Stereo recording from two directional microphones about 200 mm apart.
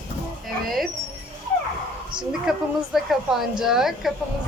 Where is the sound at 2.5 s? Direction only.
5° right (ahead or behind).